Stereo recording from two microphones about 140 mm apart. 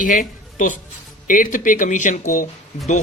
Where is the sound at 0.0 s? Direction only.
75° left (ahead or behind).